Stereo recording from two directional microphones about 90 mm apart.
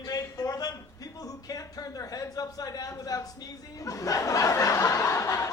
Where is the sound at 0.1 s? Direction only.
40° left (ahead or behind).